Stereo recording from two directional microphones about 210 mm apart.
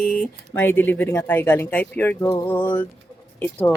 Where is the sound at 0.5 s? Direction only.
10° left (ahead or behind).